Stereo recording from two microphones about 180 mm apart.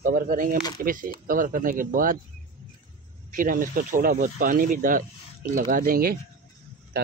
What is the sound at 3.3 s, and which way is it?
Speech, 50° right (ahead or behind).